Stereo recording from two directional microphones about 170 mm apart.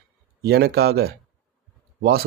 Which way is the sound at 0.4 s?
70° right (ahead or behind).